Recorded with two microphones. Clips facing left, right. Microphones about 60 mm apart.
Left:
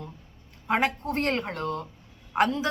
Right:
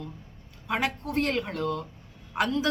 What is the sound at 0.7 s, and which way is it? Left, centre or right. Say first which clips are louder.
A woman's voice: left 3 dB; left.